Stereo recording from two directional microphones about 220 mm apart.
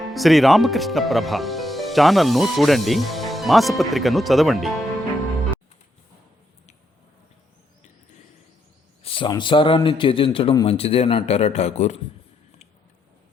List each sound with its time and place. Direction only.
0.1 s speech: centre (ahead or behind)
9.0 s a man's voice: 20° left (ahead or behind)